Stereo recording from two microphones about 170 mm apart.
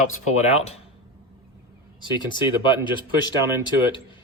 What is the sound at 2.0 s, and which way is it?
Speech, 25° left (ahead or behind).